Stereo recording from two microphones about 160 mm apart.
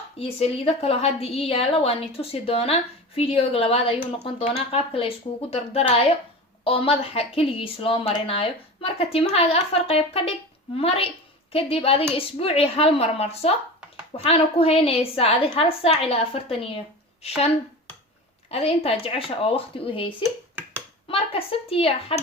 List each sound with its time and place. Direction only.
0.2 s a woman's voice: 40° left (ahead or behind)
18.5 s a woman's voice: 40° left (ahead or behind)